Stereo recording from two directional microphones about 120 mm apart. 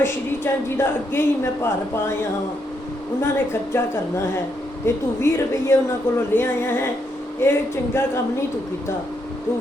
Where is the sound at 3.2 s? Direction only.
20° left (ahead or behind).